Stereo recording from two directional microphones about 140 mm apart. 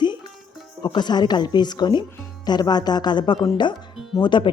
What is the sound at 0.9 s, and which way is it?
Speech, 30° left (ahead or behind).